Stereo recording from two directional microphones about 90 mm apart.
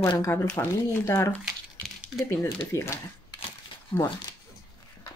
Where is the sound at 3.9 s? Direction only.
70° left (ahead or behind).